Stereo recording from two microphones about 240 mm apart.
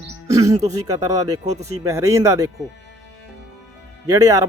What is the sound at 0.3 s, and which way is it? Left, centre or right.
Speech, centre.